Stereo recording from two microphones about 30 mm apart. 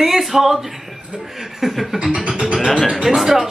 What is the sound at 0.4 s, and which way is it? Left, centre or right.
Music, centre.